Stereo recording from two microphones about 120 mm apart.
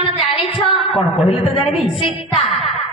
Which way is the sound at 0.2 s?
50° left (ahead or behind).